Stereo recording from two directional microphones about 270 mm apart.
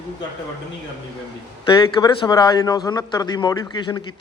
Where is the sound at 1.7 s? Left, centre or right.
Centre.